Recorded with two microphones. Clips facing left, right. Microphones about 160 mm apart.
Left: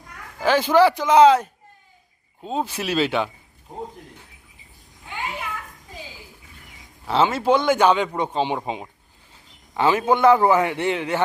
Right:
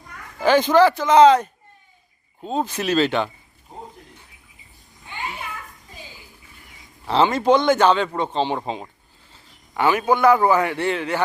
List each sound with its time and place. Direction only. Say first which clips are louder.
0.3 s speech: right 2 dB; 5° left (ahead or behind)
7.1 s speech: right 2 dB; 5° left (ahead or behind)
9.7 s a man's voice: even; 25° left (ahead or behind)